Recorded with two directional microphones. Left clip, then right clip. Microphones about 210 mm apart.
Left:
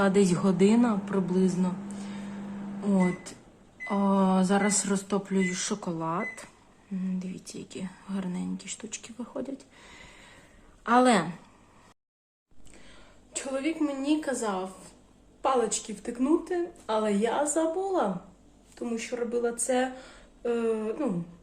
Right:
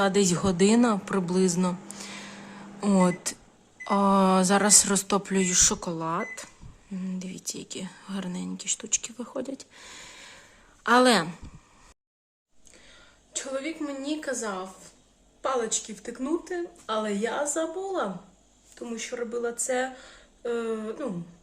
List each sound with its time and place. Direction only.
0.0 s speech: 15° right (ahead or behind); by 1.7 s 35° right (ahead or behind)
2.8 s speech: 40° right (ahead or behind)
13.3 s a woman's voice: 5° right (ahead or behind)